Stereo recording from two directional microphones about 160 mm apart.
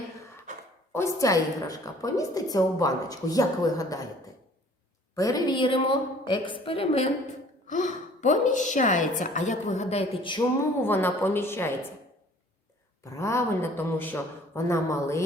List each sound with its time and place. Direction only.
0.5 s a sound: 50° right (ahead or behind)
0.9 s a woman's voice: 20° left (ahead or behind)
5.1 s a woman's voice: 20° left (ahead or behind); by 7.1 s 40° left (ahead or behind)
7.7 s a woman's voice: 50° left (ahead or behind); by 10.4 s 35° left (ahead or behind)
10.8 s a man's voice: 15° left (ahead or behind)
13.1 s a man's voice: 20° left (ahead or behind)